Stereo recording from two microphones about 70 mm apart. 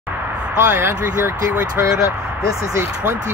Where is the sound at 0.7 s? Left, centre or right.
Right.